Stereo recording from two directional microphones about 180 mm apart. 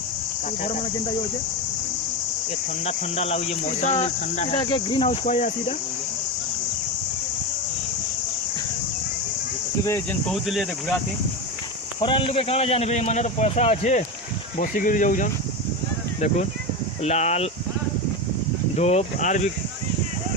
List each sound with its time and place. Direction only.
0.6 s speech: 40° left (ahead or behind)
2.8 s speech: 35° left (ahead or behind)
4.6 s speech: 25° left (ahead or behind)
5.2 s speech: 40° left (ahead or behind)
9.8 s speech: 15° left (ahead or behind)
10.3 s speech: centre (ahead or behind)
11.9 s speech: 30° left (ahead or behind)
14.6 s speech: 50° left (ahead or behind)
17.0 s speech: 40° left (ahead or behind)
18.8 s speech: 35° left (ahead or behind)